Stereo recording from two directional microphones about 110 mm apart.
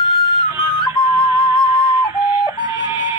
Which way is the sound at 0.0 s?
45° left (ahead or behind).